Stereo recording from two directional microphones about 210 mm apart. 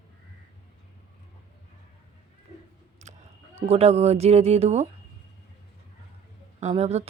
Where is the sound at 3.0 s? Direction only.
30° right (ahead or behind).